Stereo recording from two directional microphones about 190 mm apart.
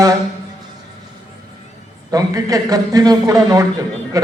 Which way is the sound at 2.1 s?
20° right (ahead or behind).